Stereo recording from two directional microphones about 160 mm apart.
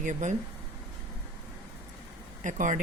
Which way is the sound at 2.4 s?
50° right (ahead or behind).